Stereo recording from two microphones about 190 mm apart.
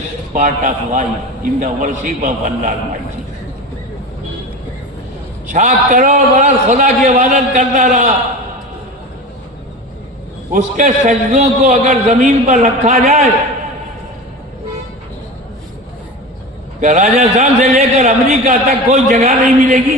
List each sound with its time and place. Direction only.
0.3 s a man's voice: 40° right (ahead or behind)
5.5 s a man's voice: 40° right (ahead or behind)
10.5 s a man's voice: 40° right (ahead or behind)
16.8 s a man's voice: 40° right (ahead or behind)